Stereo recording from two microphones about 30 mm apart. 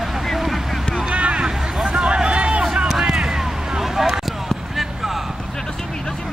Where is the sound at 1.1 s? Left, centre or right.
Right.